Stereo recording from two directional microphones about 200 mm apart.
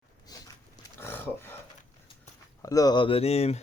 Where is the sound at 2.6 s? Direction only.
15° left (ahead or behind).